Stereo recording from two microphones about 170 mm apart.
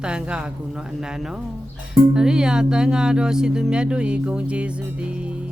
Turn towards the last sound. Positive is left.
turn(degrees=-5)  # may be behind; listen again after turning